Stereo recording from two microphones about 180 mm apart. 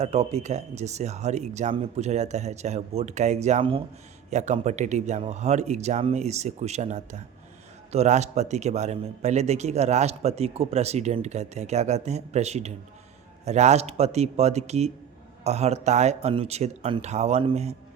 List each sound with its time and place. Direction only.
0.0 s a man's voice: 35° right (ahead or behind)